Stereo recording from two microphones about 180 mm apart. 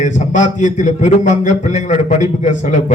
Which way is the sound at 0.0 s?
45° left (ahead or behind).